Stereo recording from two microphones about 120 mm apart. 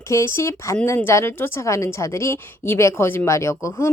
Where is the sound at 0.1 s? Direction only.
25° left (ahead or behind).